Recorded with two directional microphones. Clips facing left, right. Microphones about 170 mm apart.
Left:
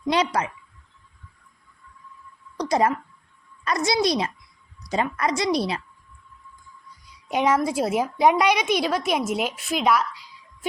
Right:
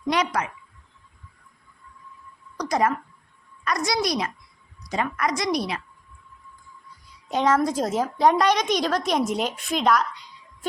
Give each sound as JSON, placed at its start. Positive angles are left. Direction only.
{"t": 0.1, "sound": "speech", "side_deg": 30}
{"t": 2.6, "sound": "a woman's voice", "side_deg": 25}
{"t": 7.3, "sound": "a woman's voice", "side_deg": 10}